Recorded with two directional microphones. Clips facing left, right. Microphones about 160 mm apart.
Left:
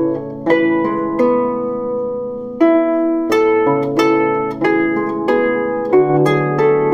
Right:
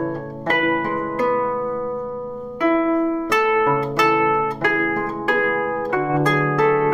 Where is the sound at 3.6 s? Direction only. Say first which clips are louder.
Left 6 dB; 35° left (ahead or behind).